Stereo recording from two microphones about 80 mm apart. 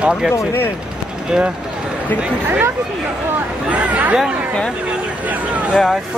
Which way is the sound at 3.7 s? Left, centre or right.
Centre.